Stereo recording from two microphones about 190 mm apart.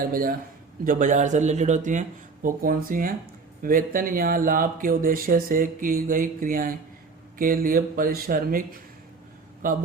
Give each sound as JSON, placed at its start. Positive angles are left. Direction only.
{"t": 0.0, "sound": "speech", "side_deg": -50}
{"t": 9.6, "sound": "speech", "side_deg": -50}